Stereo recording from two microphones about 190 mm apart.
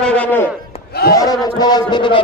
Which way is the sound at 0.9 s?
55° left (ahead or behind).